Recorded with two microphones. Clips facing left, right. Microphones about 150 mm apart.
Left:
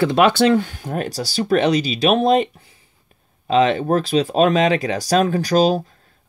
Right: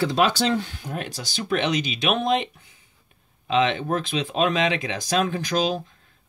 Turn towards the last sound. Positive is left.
turn(degrees=40)  # may be behind; listen again after turning